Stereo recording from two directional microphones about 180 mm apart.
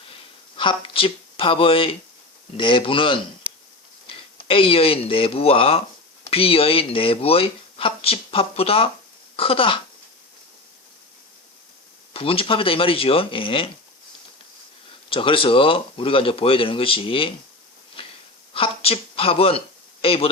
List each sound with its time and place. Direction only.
0.1 s a sound: 30° left (ahead or behind)
2.6 s speech: 30° left (ahead or behind)
12.1 s speech: 30° left (ahead or behind)
15.1 s speech: 30° left (ahead or behind)
18.0 s wheeze: 30° left (ahead or behind)
18.5 s speech: 30° left (ahead or behind)